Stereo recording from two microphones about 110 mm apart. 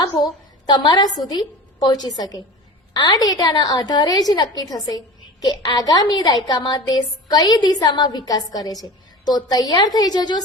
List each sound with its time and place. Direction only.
0.7 s a woman's voice: 40° left (ahead or behind)